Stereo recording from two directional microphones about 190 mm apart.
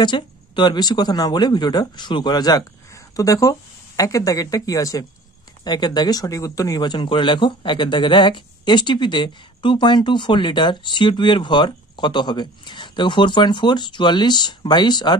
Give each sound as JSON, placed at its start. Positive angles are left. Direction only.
{"t": 0.0, "sound": "speech", "side_deg": 25}